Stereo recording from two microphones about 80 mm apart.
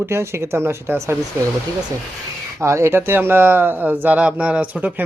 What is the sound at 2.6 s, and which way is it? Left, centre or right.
Speech, right.